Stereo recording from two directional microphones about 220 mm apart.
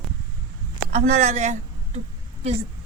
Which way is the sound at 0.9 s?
30° right (ahead or behind).